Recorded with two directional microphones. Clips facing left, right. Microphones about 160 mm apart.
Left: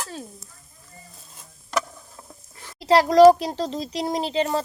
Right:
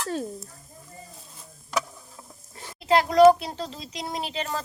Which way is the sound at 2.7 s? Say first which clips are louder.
Left 4 dB; 35° left (ahead or behind).